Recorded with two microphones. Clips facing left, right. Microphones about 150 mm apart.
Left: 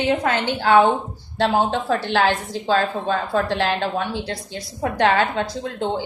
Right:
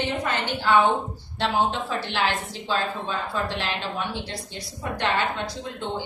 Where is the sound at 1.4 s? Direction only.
60° left (ahead or behind).